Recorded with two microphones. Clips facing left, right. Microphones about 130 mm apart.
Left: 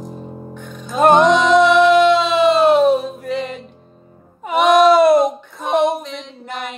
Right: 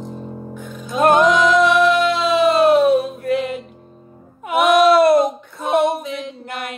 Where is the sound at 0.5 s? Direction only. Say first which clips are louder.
Left 1 dB; centre (ahead or behind).